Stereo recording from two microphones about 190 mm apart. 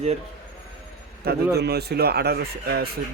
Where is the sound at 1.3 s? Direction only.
55° right (ahead or behind).